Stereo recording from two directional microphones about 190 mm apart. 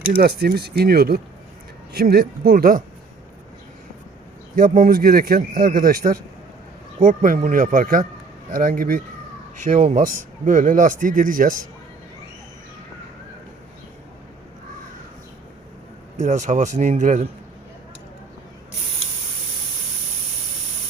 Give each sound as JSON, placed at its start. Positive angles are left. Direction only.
{"t": 0.0, "sound": "speech", "side_deg": -50}
{"t": 4.5, "sound": "speech", "side_deg": -45}
{"t": 16.1, "sound": "a man's voice", "side_deg": -40}